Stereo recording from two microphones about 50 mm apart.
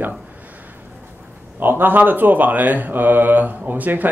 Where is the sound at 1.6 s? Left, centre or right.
Right.